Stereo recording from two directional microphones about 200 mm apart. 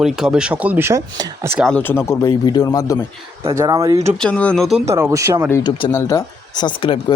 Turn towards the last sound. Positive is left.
turn(degrees=25)  # may be behind; listen again after turning